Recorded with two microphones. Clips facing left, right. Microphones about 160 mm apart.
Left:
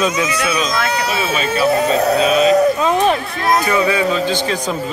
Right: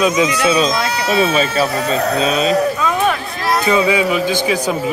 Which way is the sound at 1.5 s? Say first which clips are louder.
Left 3 dB; 25° left (ahead or behind).